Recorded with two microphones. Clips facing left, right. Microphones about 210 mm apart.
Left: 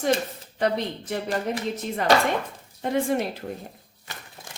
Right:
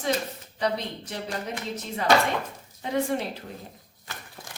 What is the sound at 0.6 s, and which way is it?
Speech, 50° left (ahead or behind).